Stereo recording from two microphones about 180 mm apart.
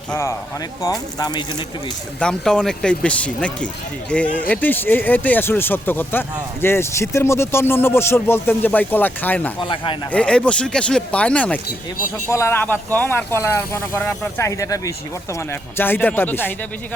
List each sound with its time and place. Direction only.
0.1 s speech: 15° left (ahead or behind)
2.1 s speech: 5° left (ahead or behind)
9.6 s speech: 30° left (ahead or behind)
10.1 s speech: 5° left (ahead or behind)